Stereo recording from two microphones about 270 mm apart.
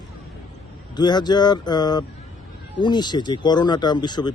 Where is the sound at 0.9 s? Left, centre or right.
Centre.